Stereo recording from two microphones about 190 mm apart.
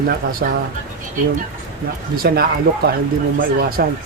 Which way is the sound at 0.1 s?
50° right (ahead or behind).